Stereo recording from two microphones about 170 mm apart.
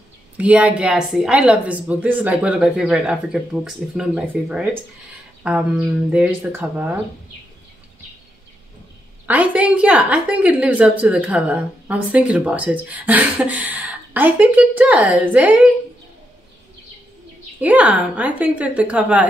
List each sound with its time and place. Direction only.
0.4 s a woman's voice: 10° right (ahead or behind)
6.1 s a woman's voice: 10° right (ahead or behind)
9.2 s a woman's voice: 10° right (ahead or behind)
17.6 s a woman's voice: 10° right (ahead or behind)